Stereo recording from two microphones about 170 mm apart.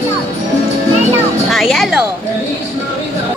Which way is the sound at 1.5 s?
Centre (ahead or behind).